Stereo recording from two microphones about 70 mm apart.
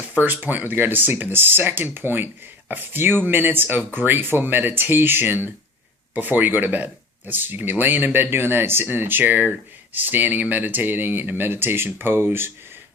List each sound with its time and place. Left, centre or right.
0.1 s speech: right